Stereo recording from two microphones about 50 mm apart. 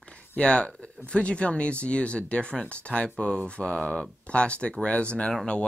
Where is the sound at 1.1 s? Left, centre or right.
Left.